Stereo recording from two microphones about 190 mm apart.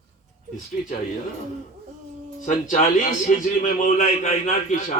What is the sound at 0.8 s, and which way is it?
Speech, 40° left (ahead or behind).